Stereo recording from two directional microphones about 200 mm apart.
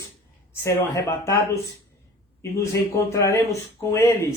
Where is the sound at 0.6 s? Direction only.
15° left (ahead or behind).